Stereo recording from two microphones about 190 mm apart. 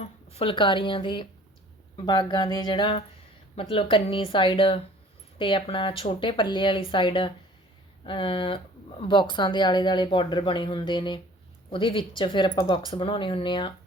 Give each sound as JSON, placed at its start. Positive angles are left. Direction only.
{"t": 0.0, "sound": "speech", "side_deg": 30}